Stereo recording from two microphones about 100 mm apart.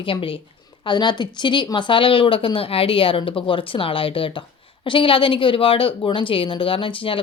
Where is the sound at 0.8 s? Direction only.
45° left (ahead or behind).